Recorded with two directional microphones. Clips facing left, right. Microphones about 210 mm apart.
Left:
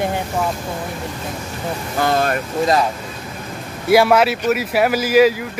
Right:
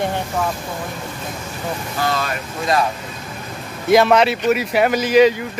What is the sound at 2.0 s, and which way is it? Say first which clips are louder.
Speech: left 5 dB; 50° left (ahead or behind).